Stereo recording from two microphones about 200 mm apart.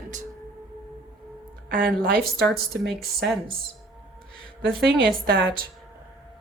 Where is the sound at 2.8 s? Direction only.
Centre (ahead or behind).